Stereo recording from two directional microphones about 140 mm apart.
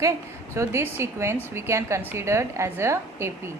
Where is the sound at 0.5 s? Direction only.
20° right (ahead or behind).